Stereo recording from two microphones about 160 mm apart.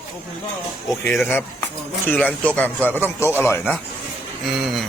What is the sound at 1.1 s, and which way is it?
Speech, 5° left (ahead or behind).